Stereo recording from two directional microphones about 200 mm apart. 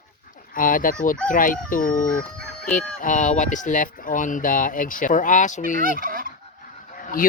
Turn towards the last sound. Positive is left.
turn(degrees=45)  # may be behind; listen again after turning